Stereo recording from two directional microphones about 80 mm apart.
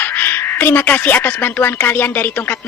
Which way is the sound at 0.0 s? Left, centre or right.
Left.